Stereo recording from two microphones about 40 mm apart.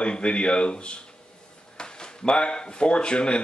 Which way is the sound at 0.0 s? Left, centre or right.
Left.